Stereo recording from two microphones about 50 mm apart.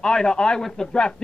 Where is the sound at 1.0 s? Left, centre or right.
Centre.